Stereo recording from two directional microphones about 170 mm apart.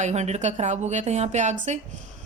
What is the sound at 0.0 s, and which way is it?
Speech, 40° right (ahead or behind).